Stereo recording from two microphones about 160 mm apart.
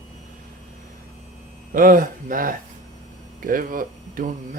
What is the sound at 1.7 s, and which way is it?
Speech, 60° right (ahead or behind).